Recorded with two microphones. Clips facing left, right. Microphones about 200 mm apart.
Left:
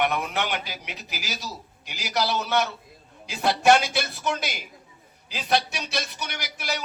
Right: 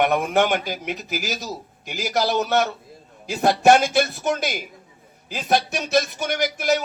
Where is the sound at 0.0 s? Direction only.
50° right (ahead or behind).